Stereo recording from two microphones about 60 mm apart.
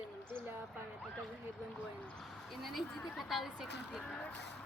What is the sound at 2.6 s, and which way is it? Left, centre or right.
A woman's voice, centre.